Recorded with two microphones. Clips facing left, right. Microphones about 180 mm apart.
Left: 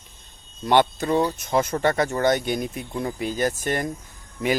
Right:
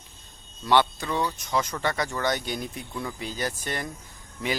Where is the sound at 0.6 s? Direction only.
45° left (ahead or behind).